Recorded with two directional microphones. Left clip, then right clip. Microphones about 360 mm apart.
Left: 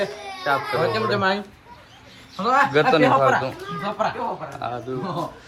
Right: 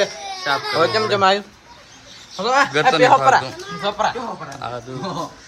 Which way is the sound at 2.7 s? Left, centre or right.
Centre.